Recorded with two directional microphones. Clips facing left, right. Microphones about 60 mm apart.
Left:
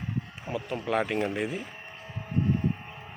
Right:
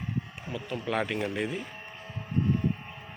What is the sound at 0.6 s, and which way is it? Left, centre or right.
Speech, centre.